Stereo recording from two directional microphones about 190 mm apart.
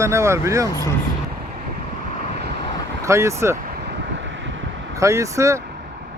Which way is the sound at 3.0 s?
15° right (ahead or behind).